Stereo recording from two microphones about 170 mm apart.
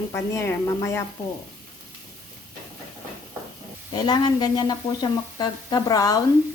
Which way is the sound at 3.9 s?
25° left (ahead or behind).